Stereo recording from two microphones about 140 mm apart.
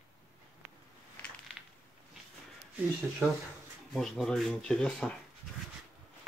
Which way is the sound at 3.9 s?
Centre (ahead or behind).